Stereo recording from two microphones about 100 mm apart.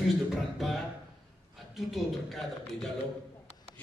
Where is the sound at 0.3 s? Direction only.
Centre (ahead or behind).